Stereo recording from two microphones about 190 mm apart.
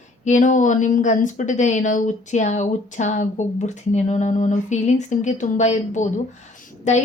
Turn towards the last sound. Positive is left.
turn(degrees=40)  # may be behind; listen again after turning